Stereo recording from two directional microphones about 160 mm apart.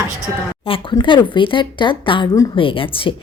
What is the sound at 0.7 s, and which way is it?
A woman's voice, 30° left (ahead or behind).